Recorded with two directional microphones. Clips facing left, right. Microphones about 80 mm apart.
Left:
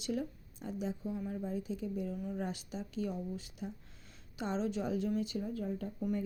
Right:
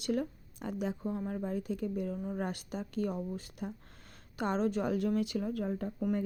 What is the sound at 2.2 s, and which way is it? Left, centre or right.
Speech, right.